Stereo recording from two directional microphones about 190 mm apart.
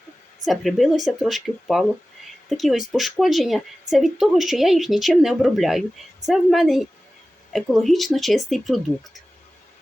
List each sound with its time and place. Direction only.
0.4 s speech: centre (ahead or behind)